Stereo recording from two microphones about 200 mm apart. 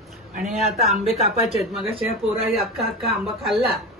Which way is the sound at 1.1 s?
35° left (ahead or behind).